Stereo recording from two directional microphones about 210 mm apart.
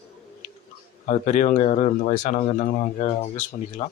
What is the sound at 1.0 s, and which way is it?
Speech, 35° left (ahead or behind).